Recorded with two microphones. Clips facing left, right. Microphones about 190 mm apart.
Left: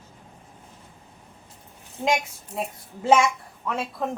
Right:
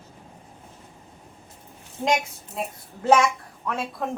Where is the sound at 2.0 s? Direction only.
5° left (ahead or behind).